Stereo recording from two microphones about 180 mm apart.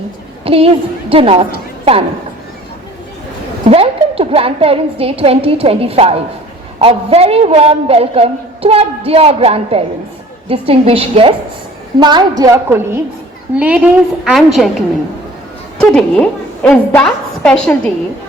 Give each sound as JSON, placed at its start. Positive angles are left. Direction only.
{"t": 0.4, "sound": "a woman's voice", "side_deg": -30}
{"t": 3.7, "sound": "a woman's voice", "side_deg": -30}